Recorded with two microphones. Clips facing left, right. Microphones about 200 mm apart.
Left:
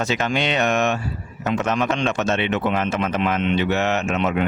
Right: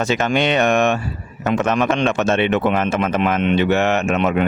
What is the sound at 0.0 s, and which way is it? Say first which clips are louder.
Speech: right 4 dB; 50° right (ahead or behind).